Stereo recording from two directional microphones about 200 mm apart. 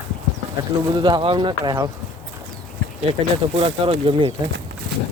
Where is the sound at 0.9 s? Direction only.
25° right (ahead or behind).